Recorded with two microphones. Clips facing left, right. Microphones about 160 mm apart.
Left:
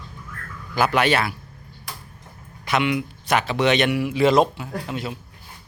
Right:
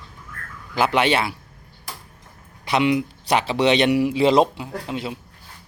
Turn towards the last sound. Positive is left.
turn(degrees=-25)  # may be behind; listen again after turning